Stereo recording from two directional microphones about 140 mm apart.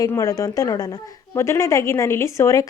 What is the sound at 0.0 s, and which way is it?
A woman's voice, 25° left (ahead or behind).